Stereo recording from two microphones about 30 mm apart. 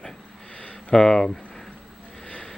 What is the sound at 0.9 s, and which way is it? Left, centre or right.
Speech, left.